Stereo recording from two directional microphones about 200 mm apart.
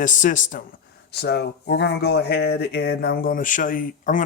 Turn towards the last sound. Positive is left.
turn(degrees=45)  # may be behind; listen again after turning